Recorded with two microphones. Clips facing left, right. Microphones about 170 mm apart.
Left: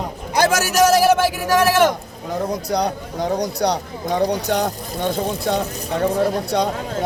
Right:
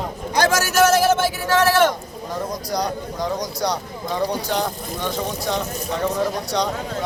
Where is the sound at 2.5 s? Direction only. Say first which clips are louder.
Left 3 dB; 60° left (ahead or behind).